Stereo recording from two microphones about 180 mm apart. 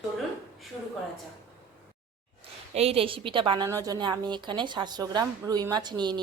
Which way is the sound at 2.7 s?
35° right (ahead or behind).